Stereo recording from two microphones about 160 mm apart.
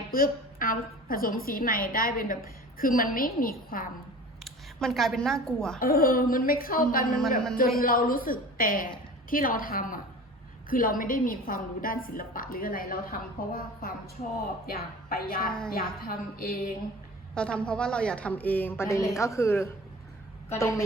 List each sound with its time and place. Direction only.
0.1 s a woman's voice: 60° left (ahead or behind)
4.4 s speech: centre (ahead or behind)
5.8 s a woman's voice: 65° left (ahead or behind)
17.3 s a woman's voice: 5° left (ahead or behind)